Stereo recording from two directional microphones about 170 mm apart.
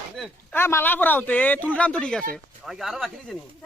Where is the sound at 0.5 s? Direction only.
15° left (ahead or behind).